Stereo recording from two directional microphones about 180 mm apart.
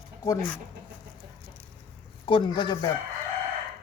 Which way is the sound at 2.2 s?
25° left (ahead or behind).